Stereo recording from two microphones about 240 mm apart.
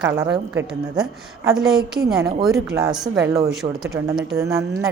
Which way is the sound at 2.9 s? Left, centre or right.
Centre.